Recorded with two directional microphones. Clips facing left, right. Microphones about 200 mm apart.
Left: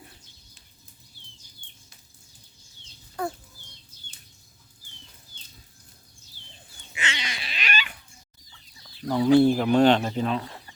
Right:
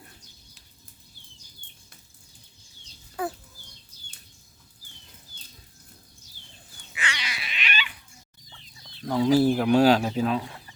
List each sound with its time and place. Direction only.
3.2 s a sound: 5° right (ahead or behind)
6.9 s cat: 25° left (ahead or behind); by 7.9 s 45° left (ahead or behind)
8.9 s speech: 5° left (ahead or behind)